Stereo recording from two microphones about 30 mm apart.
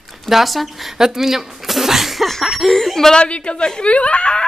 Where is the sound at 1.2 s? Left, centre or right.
Centre.